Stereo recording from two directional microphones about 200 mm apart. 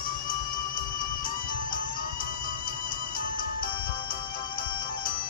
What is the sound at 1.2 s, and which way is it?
Music, 45° left (ahead or behind).